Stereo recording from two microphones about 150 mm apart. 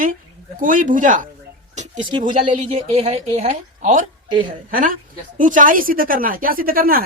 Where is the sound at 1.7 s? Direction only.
50° right (ahead or behind).